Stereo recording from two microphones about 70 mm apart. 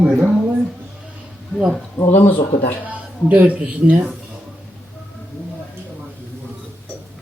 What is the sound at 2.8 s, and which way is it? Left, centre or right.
Speech, right.